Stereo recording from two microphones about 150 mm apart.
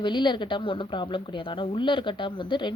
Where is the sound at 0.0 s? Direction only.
30° left (ahead or behind).